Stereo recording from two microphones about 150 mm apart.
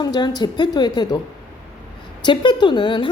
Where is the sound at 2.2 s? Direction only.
30° left (ahead or behind).